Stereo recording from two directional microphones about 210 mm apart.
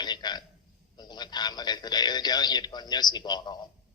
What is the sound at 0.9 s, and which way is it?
A man's voice, 20° left (ahead or behind).